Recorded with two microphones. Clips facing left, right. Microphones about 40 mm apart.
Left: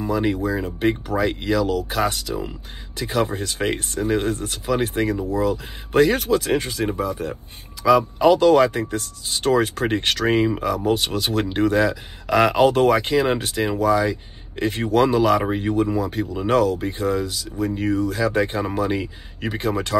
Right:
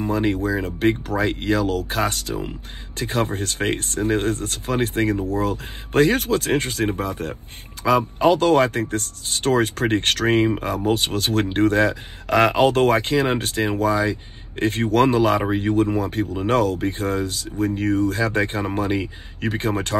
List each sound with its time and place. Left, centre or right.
0.7 s speech: right
7.8 s speech: right
11.1 s speech: right